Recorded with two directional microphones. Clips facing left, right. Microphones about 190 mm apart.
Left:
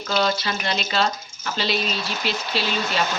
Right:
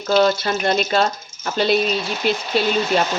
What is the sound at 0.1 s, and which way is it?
Speech, 50° right (ahead or behind).